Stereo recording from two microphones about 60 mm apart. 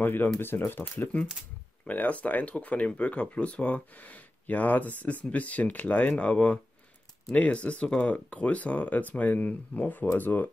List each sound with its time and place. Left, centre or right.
0.0 s speech: left